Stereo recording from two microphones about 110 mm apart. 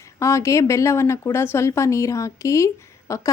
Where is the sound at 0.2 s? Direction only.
25° left (ahead or behind).